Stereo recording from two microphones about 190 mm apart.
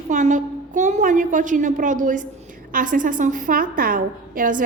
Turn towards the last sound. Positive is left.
turn(degrees=-45)  # may be behind; listen again after turning